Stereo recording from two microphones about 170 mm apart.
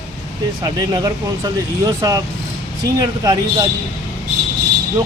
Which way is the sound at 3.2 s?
20° right (ahead or behind).